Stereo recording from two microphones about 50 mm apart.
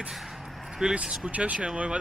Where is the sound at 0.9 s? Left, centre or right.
Right.